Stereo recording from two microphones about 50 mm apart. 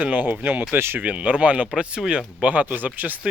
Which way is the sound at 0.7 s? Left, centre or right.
Right.